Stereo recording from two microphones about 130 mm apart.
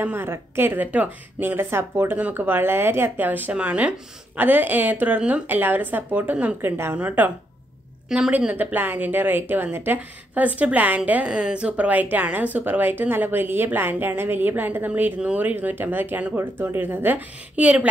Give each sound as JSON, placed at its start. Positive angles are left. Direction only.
{"t": 0.0, "sound": "a woman's voice", "side_deg": -20}